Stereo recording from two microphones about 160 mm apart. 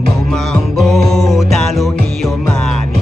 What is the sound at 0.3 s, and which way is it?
Music, centre (ahead or behind).